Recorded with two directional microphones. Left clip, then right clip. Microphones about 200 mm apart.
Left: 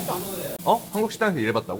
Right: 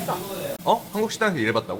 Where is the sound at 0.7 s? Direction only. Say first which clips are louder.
Even; 10° left (ahead or behind).